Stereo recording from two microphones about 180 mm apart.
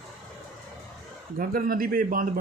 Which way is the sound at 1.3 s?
50° right (ahead or behind).